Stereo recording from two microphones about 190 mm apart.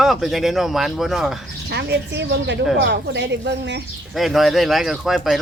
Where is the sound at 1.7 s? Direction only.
65° right (ahead or behind).